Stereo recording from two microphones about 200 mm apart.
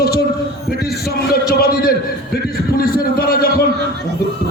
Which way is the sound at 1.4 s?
50° left (ahead or behind).